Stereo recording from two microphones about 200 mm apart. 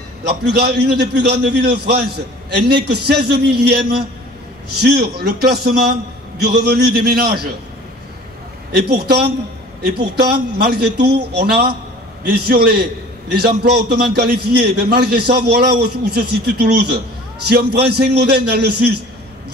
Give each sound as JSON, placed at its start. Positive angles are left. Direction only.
{"t": 0.3, "sound": "a man's voice", "side_deg": -55}
{"t": 8.7, "sound": "a man's voice", "side_deg": -50}